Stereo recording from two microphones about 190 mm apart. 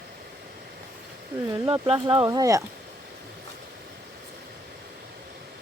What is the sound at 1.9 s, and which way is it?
Speech, 25° right (ahead or behind).